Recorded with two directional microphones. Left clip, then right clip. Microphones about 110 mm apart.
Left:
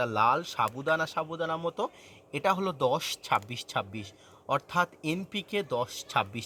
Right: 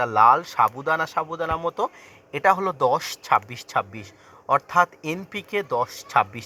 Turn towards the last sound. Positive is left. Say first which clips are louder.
# right 8 dB
turn(degrees=15)  # may be behind; listen again after turning